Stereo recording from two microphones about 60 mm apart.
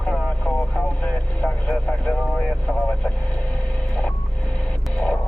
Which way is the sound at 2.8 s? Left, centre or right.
Left.